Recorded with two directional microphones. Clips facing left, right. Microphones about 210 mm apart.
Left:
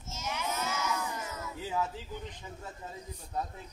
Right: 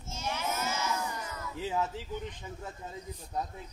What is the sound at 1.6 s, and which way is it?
Speech, 25° right (ahead or behind).